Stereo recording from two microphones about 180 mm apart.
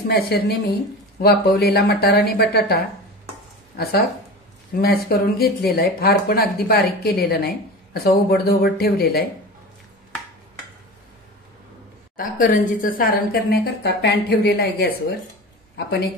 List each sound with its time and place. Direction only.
0.1 s speech: 65° left (ahead or behind)
12.2 s speech: 50° left (ahead or behind)